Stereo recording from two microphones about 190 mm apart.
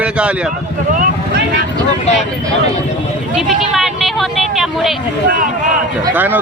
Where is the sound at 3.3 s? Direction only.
Centre (ahead or behind).